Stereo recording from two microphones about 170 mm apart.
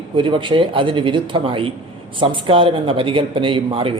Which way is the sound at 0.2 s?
30° right (ahead or behind).